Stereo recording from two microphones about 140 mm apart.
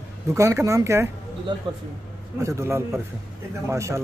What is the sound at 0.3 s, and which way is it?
Speech, 20° right (ahead or behind).